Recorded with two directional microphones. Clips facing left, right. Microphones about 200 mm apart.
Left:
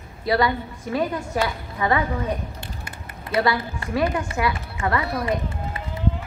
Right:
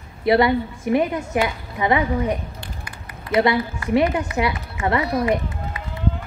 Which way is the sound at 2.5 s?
25° left (ahead or behind).